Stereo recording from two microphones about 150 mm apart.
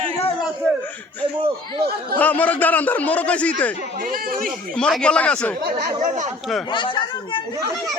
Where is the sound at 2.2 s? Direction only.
10° left (ahead or behind).